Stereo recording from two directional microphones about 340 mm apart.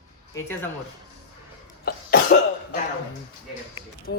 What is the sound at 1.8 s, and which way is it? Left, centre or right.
Cough, left.